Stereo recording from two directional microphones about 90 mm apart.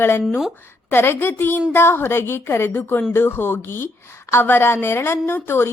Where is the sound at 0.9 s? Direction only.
25° left (ahead or behind).